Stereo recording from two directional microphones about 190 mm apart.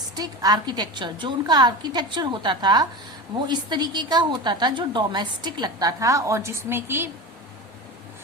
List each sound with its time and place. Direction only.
0.2 s a woman's voice: 20° right (ahead or behind)